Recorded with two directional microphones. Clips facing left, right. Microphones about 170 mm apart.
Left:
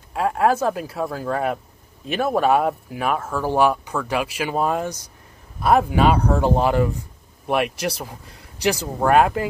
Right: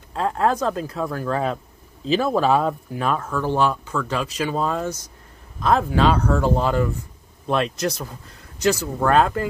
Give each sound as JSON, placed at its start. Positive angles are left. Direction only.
{"t": 0.1, "sound": "speech", "side_deg": 10}